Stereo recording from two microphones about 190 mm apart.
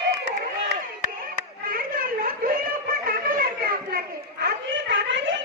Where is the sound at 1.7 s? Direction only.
50° right (ahead or behind).